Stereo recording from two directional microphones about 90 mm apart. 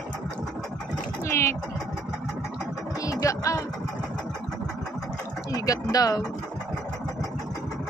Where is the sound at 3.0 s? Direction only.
40° left (ahead or behind).